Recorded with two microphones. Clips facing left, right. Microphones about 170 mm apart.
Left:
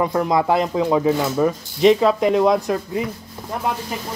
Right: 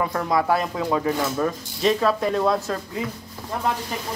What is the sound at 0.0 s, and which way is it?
Speech, 20° left (ahead or behind).